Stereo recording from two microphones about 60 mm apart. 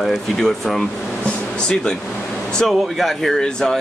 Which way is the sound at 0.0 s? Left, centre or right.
Centre.